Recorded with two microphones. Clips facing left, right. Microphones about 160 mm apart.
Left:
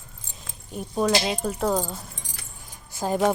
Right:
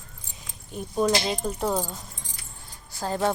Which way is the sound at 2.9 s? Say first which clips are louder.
Left 3 dB; 15° left (ahead or behind).